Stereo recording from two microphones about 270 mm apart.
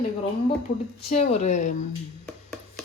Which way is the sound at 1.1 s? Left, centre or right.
Left.